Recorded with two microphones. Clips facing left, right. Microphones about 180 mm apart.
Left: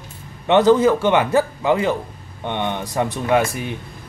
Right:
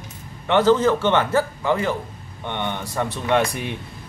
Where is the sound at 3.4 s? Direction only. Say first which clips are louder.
Left 1 dB; centre (ahead or behind).